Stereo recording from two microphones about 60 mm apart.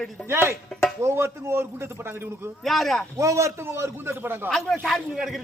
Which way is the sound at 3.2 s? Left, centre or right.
Right.